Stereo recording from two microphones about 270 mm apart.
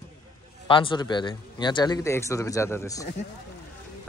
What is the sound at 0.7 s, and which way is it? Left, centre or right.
A man's voice, centre.